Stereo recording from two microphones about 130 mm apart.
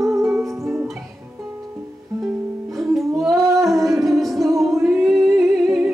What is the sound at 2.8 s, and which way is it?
Music, centre (ahead or behind).